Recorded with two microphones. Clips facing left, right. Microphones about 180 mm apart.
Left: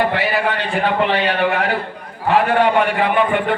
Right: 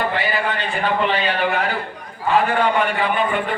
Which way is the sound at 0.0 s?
70° left (ahead or behind).